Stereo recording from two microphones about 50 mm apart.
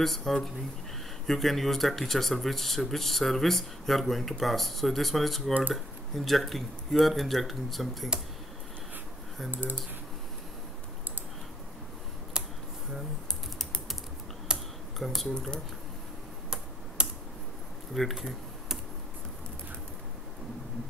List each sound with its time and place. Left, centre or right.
0.0 s speech: centre
9.5 s speech: right
12.4 s a sound: centre
14.5 s computer keyboard: centre
15.0 s speech: centre
15.3 s speech: centre
17.0 s computer keyboard: centre
17.9 s computer keyboard: centre